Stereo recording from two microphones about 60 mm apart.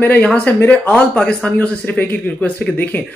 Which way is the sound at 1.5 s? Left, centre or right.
Left.